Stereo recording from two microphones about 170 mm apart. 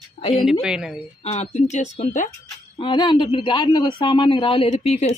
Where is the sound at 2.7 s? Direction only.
30° left (ahead or behind).